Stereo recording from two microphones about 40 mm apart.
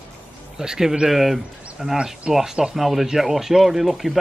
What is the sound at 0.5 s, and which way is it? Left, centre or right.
Speech, centre.